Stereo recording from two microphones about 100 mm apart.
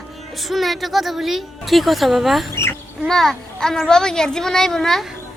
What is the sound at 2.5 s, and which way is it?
Bird, 25° left (ahead or behind).